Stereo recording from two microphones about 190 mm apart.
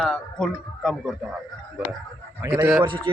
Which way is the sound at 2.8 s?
25° right (ahead or behind).